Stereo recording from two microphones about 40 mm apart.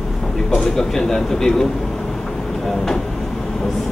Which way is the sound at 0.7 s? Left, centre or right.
Centre.